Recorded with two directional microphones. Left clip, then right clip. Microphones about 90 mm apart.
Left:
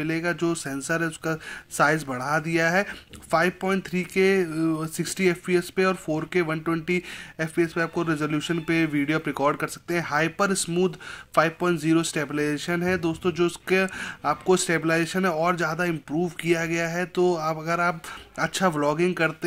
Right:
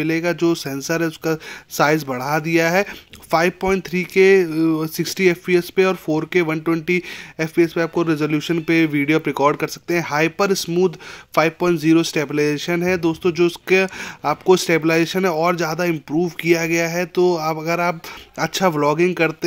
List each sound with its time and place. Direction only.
0.0 s speech: 25° right (ahead or behind)